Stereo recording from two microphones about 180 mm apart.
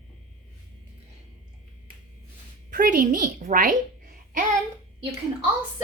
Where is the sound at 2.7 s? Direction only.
50° right (ahead or behind).